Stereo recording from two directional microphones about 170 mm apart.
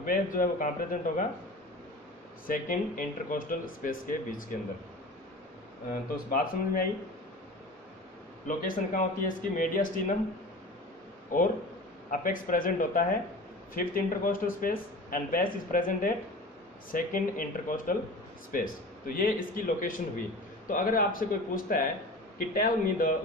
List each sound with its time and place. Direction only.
0.0 s speech: 55° left (ahead or behind)
2.4 s speech: 55° left (ahead or behind)
6.1 s speech: 55° left (ahead or behind)
8.5 s speech: 55° left (ahead or behind)
11.3 s speech: 50° left (ahead or behind)